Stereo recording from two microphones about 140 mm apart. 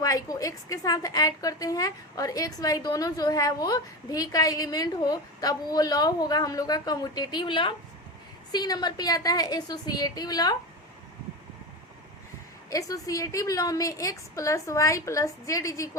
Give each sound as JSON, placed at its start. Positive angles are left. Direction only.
{"t": 0.0, "sound": "a woman's voice", "side_deg": 25}
{"t": 12.7, "sound": "a woman's voice", "side_deg": 25}